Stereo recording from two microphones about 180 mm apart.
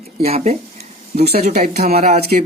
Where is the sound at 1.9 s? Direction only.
35° right (ahead or behind).